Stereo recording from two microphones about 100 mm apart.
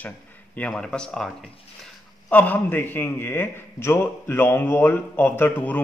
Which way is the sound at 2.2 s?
15° left (ahead or behind).